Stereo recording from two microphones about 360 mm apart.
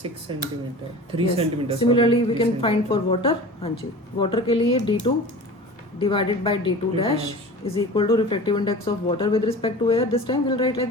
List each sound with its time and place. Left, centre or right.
0.3 s speech: centre
1.8 s speech: centre
6.0 s speech: centre